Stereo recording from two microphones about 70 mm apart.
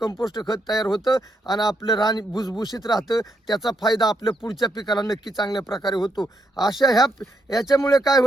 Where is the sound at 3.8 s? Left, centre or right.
Left.